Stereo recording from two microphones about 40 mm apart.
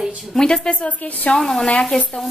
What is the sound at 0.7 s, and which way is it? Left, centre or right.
Speech, left.